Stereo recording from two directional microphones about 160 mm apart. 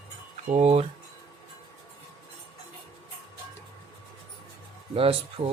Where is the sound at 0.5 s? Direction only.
40° right (ahead or behind).